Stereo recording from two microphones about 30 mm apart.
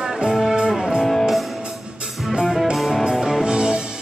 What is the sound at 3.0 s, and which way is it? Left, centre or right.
Music, centre.